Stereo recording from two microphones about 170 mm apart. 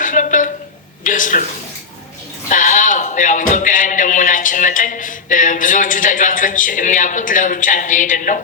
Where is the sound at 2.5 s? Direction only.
50° left (ahead or behind).